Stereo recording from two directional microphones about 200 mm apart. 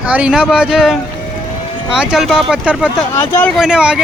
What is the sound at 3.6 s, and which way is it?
Speech, 5° right (ahead or behind).